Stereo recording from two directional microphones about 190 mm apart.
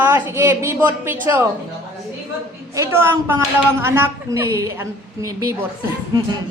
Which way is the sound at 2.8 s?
10° right (ahead or behind).